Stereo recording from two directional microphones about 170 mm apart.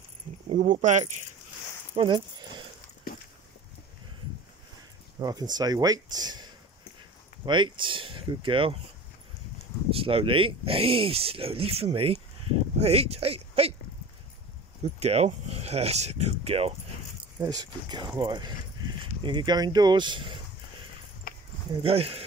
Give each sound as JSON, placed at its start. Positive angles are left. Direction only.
{"t": 0.5, "sound": "speech", "side_deg": -50}
{"t": 2.0, "sound": "a sound", "side_deg": -25}
{"t": 5.2, "sound": "speech", "side_deg": -25}
{"t": 9.8, "sound": "speech", "side_deg": -35}
{"t": 14.8, "sound": "speech", "side_deg": -40}
{"t": 17.4, "sound": "speech", "side_deg": -25}
{"t": 21.8, "sound": "speech", "side_deg": -35}